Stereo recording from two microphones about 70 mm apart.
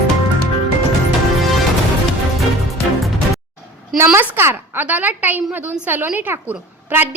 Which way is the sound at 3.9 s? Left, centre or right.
Right.